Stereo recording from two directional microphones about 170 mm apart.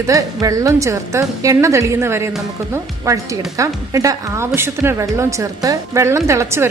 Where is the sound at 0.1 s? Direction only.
20° right (ahead or behind).